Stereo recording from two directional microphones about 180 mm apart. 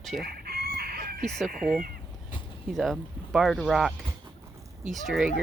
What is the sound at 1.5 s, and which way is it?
Speech, 50° right (ahead or behind).